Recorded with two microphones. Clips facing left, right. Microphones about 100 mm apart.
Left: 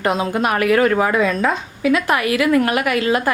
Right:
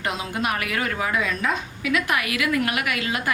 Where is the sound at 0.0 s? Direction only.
45° left (ahead or behind).